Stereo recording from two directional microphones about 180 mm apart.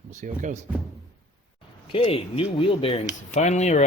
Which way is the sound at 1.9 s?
30° left (ahead or behind).